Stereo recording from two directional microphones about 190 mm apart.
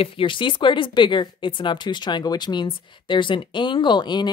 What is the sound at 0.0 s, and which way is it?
Speech, 25° left (ahead or behind).